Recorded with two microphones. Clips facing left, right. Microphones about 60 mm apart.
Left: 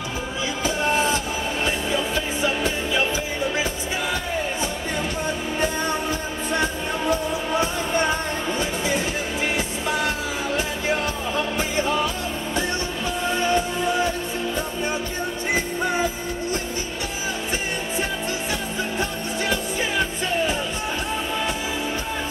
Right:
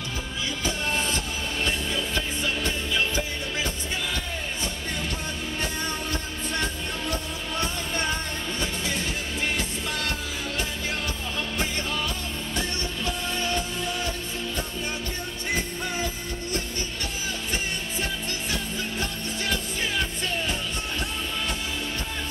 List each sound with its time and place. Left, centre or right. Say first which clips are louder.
0.8 s music: left 9 dB; centre
5.6 s music: left 7 dB; centre
12.5 s music: left 5 dB; centre
15.5 s music: left 6 dB; centre
18.5 s music: left 4 dB; centre